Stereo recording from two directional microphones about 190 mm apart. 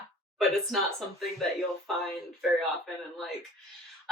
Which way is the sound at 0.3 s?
Centre (ahead or behind).